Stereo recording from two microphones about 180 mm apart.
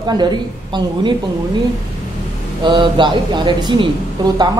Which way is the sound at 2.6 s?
25° right (ahead or behind).